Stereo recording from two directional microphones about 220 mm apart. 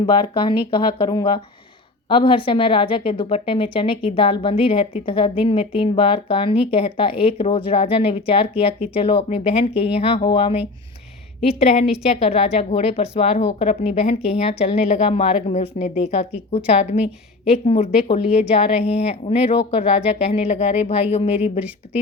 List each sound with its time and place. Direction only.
0.0 s speech: 20° left (ahead or behind)